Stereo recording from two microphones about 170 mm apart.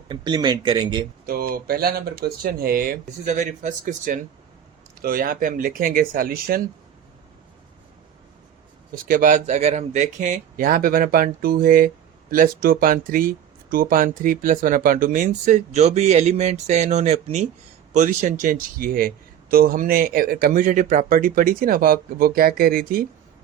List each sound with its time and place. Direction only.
0.1 s speech: 25° right (ahead or behind)
1.3 s speech: 60° right (ahead or behind)
9.0 s speech: 50° right (ahead or behind)